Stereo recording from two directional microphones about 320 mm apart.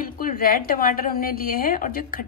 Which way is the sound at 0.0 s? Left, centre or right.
Left.